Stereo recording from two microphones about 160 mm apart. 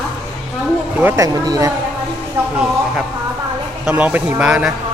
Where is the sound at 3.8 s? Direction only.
10° right (ahead or behind).